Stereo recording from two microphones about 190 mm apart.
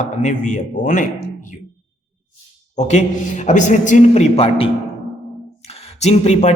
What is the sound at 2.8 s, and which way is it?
A man's voice, 40° left (ahead or behind).